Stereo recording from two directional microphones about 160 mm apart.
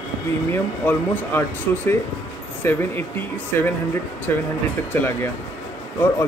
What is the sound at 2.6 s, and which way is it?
Speech, 15° left (ahead or behind).